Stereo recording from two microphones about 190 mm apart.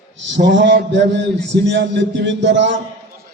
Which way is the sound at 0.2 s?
70° right (ahead or behind).